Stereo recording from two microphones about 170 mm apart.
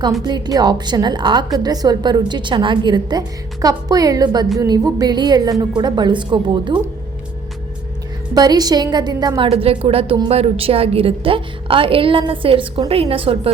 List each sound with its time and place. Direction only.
0.3 s a woman's voice: 25° right (ahead or behind)
8.4 s a woman's voice: 25° right (ahead or behind)
9.5 s a woman's voice: 35° right (ahead or behind)